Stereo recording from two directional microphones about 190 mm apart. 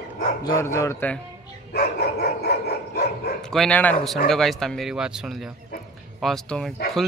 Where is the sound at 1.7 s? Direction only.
60° left (ahead or behind).